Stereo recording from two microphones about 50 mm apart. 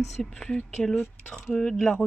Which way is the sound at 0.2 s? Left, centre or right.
Centre.